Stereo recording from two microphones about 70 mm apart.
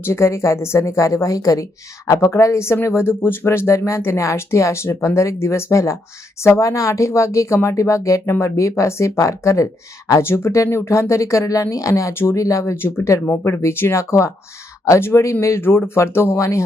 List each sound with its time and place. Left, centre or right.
0.0 s speech: left
12.1 s speech: left
12.7 s speech: left